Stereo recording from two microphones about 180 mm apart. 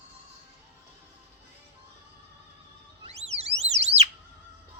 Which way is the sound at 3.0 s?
35° right (ahead or behind).